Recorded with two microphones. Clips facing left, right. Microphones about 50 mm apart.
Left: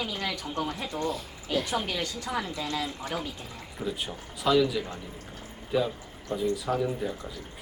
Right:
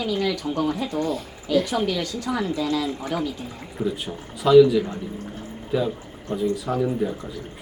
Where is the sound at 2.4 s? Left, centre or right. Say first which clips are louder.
Right 8 dB; right.